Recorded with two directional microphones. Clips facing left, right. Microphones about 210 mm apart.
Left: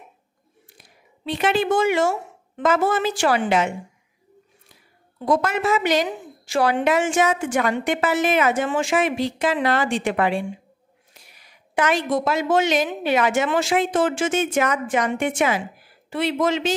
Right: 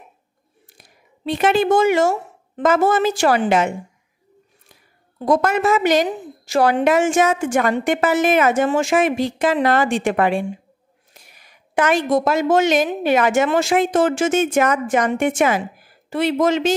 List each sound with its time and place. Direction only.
0.7 s a woman's voice: 45° right (ahead or behind)
5.2 s a woman's voice: 45° right (ahead or behind)